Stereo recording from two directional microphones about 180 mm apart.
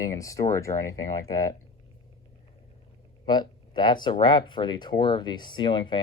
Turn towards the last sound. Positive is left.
turn(degrees=25)  # may be behind; listen again after turning